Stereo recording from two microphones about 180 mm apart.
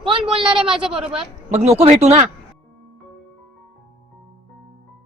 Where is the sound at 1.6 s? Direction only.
35° right (ahead or behind).